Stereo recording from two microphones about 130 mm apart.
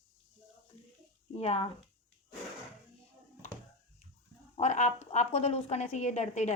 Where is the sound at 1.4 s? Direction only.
50° left (ahead or behind).